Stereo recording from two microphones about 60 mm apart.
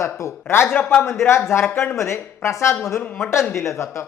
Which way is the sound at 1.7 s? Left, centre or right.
Left.